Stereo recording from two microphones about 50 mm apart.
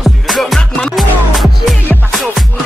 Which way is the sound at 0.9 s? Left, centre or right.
Centre.